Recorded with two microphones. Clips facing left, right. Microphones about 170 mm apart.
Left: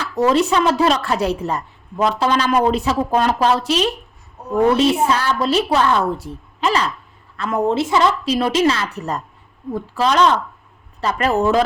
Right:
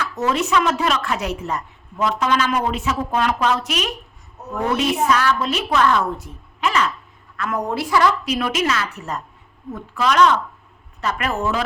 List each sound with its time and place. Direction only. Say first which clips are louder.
0.0 s a woman's voice: left 5 dB; 35° left (ahead or behind)